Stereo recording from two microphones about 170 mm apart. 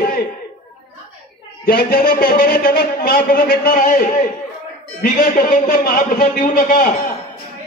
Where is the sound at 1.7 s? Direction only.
60° left (ahead or behind).